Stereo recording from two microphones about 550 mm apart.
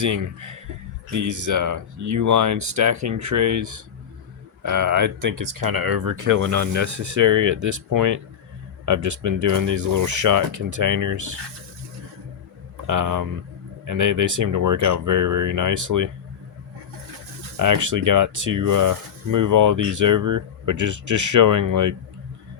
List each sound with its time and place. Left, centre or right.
0.0 s speech: right
12.9 s speech: right
17.6 s speech: right